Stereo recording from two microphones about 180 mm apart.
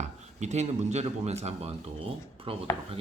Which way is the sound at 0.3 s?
40° right (ahead or behind).